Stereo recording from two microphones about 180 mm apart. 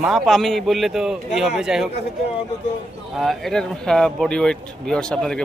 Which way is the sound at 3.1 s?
Centre (ahead or behind).